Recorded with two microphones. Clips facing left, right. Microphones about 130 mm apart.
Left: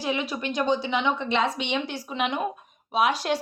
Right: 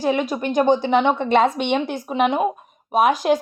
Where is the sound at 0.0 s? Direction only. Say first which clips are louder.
Right 7 dB; 45° right (ahead or behind).